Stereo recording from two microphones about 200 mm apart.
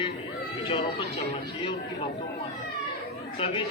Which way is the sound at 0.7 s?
30° left (ahead or behind).